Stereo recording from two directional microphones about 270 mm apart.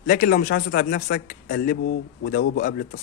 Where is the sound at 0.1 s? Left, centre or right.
Left.